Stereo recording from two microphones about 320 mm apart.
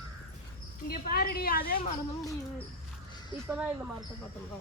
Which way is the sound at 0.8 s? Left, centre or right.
Left.